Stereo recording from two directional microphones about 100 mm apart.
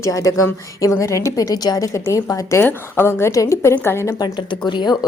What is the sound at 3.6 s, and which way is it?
Speech, 20° left (ahead or behind).